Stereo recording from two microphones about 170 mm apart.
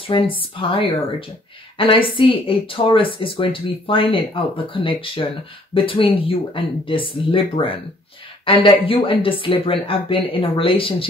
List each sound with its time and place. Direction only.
0.0 s speech: 30° left (ahead or behind)